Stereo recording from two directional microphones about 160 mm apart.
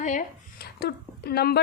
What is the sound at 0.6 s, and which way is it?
Speech, 80° left.